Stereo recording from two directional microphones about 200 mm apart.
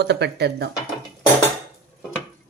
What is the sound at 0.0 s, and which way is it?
Speech, 60° right (ahead or behind).